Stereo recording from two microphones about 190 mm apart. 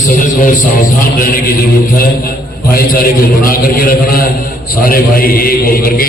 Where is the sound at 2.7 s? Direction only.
50° left (ahead or behind).